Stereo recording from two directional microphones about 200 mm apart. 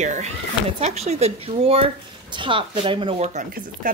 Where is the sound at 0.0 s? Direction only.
35° right (ahead or behind).